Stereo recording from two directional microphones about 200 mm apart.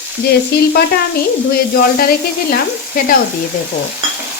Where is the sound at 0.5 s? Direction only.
55° left (ahead or behind).